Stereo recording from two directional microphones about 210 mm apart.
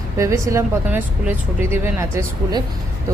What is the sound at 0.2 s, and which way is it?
Speech, 15° right (ahead or behind).